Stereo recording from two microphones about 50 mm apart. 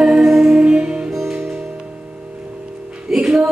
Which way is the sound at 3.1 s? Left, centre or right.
Centre.